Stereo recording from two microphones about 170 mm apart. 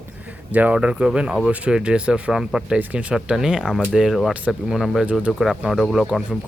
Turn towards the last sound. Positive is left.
turn(degrees=0)  # may be behind; listen again after turning